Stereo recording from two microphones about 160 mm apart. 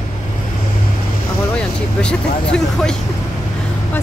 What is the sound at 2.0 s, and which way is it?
Speech, 5° left (ahead or behind).